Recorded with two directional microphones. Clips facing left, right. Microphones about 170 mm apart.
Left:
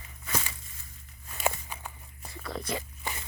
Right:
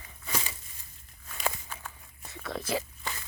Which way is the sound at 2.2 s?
Centre (ahead or behind).